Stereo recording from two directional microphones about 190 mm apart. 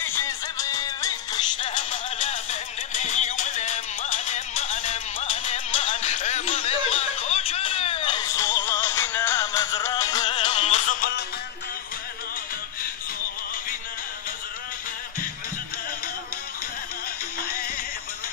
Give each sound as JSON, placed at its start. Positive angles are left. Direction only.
{"t": 0.6, "sound": "music", "side_deg": 20}